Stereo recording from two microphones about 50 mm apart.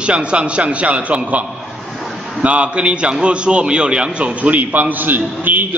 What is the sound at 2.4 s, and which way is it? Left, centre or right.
A man's voice, right.